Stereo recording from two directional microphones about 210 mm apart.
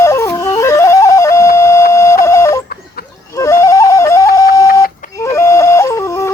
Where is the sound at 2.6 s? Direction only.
45° left (ahead or behind).